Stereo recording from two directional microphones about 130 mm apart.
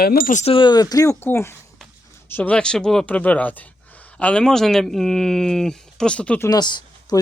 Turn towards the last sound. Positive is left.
turn(degrees=35)  # may be behind; listen again after turning